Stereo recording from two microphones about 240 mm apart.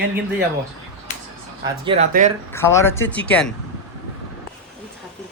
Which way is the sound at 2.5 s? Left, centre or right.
Centre.